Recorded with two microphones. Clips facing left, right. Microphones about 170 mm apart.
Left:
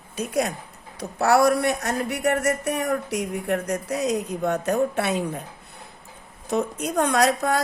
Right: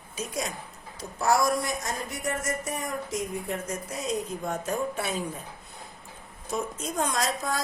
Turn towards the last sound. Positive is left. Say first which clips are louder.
# left 8 dB
turn(degrees=65)  # may be behind; listen again after turning